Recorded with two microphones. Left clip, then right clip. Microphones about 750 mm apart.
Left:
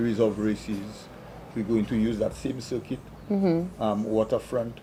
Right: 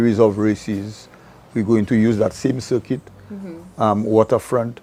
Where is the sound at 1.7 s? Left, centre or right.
Right.